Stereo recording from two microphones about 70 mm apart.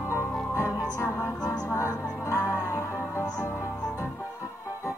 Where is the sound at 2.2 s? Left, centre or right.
Left.